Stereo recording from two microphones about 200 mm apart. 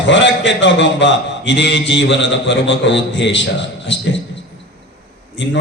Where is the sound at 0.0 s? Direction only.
65° left (ahead or behind).